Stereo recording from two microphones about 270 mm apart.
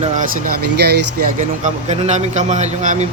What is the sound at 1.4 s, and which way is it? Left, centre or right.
Speech, right.